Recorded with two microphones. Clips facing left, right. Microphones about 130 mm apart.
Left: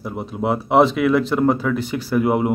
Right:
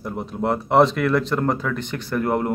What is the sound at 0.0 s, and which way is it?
Speech, 5° left (ahead or behind).